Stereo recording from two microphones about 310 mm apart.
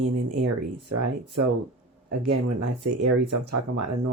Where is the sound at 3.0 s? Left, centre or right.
Right.